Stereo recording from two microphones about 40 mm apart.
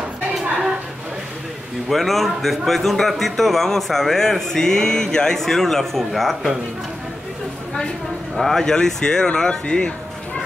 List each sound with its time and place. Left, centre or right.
1.9 s a man's voice: centre
8.4 s speech: centre
8.6 s a man's voice: centre